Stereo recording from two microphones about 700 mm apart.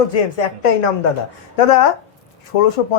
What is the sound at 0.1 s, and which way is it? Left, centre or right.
Speech, left.